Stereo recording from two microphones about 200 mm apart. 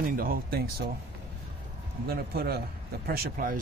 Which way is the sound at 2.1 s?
50° right (ahead or behind).